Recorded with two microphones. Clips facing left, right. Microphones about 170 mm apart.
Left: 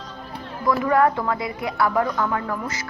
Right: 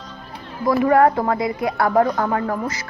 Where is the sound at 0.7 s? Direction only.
35° right (ahead or behind).